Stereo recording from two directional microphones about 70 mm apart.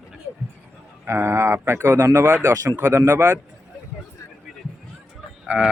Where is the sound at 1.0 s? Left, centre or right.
Right.